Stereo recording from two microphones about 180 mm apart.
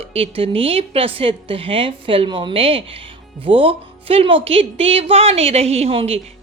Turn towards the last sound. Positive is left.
turn(degrees=-35)  # may be behind; listen again after turning